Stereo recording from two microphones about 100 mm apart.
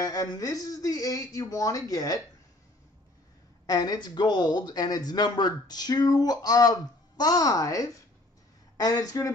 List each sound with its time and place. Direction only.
0.0 s speech: 40° left (ahead or behind)
3.6 s speech: 40° left (ahead or behind)